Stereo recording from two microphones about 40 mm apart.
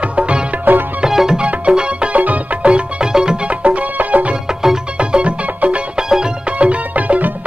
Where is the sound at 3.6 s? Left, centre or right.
Right.